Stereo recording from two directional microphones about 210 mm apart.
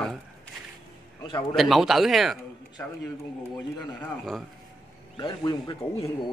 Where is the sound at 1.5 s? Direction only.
Centre (ahead or behind).